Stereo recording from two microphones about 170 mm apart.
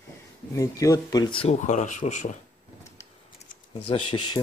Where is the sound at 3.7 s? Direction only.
30° left (ahead or behind).